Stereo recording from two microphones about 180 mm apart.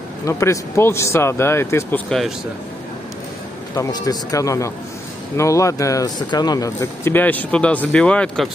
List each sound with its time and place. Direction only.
0.2 s speech: 15° left (ahead or behind)
2.0 s speech: centre (ahead or behind)
3.7 s speech: 20° left (ahead or behind)